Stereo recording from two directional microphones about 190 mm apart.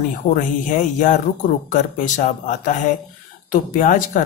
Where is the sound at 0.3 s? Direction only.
40° left (ahead or behind).